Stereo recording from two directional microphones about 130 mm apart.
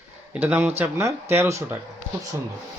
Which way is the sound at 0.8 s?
20° right (ahead or behind).